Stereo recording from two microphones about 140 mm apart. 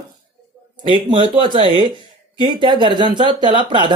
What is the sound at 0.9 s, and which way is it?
Speech, 35° right (ahead or behind).